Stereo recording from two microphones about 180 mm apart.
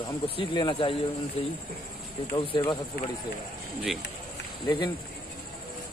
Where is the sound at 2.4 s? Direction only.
25° left (ahead or behind).